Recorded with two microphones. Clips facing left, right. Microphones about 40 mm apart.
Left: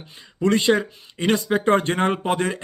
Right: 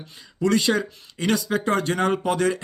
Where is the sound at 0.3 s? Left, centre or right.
Left.